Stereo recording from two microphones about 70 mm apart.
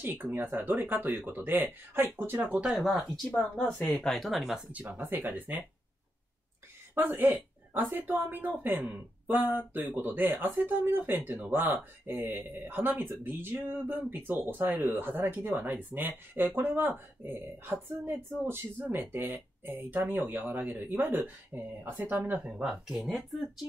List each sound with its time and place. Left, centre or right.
0.0 s speech: right
2.8 s speech: centre
3.5 s speech: centre
4.7 s speech: right
7.0 s speech: right
22.5 s speech: centre